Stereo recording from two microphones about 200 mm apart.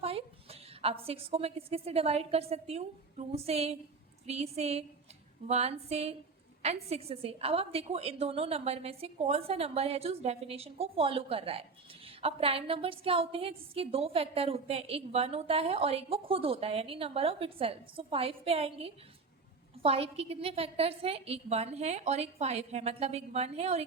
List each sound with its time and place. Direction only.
0.0 s a woman's voice: 30° right (ahead or behind)